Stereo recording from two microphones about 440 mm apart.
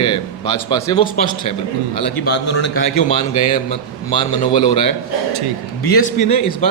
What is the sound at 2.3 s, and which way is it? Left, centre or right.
Speech, left.